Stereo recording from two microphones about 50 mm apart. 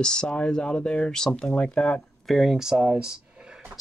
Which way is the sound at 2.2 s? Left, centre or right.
Centre.